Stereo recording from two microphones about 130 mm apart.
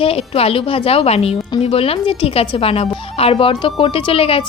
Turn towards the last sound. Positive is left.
turn(degrees=45)  # may be behind; listen again after turning